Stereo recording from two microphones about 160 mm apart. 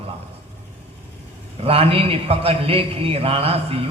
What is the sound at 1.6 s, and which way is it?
A man's voice, 35° right (ahead or behind).